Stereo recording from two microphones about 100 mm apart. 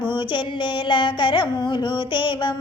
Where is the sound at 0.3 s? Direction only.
55° left (ahead or behind).